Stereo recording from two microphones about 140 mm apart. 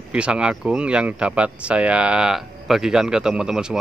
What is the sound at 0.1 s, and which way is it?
Speech, 5° right (ahead or behind).